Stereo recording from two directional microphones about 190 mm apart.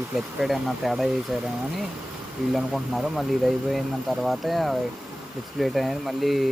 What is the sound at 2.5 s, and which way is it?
Speech, centre (ahead or behind).